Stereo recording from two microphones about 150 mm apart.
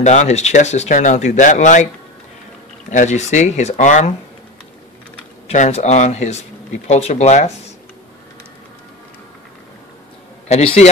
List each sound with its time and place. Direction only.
0.0 s speech: 50° left (ahead or behind)
2.9 s speech: 55° left (ahead or behind)
5.5 s speech: 50° left (ahead or behind)
10.5 s speech: 40° left (ahead or behind)